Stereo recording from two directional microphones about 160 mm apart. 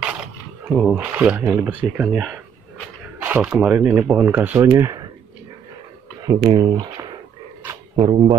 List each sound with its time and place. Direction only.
0.7 s speech: 10° right (ahead or behind)
6.2 s speech: 25° right (ahead or behind)